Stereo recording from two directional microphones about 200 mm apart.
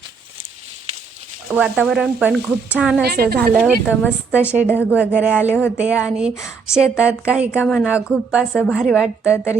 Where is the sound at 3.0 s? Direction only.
50° right (ahead or behind).